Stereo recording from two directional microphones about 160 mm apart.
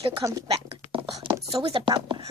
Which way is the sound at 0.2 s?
25° right (ahead or behind).